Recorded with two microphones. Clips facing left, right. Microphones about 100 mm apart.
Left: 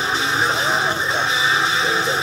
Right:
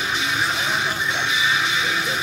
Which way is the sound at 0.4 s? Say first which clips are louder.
Left 5 dB; 30° left (ahead or behind).